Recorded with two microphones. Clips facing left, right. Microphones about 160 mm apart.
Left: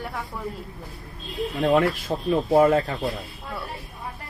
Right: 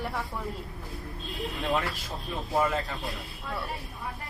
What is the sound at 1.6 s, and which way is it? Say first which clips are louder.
Speech: left 10 dB; 50° left (ahead or behind).